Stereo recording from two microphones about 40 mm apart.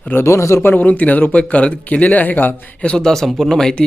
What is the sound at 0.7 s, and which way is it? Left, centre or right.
Speech, left.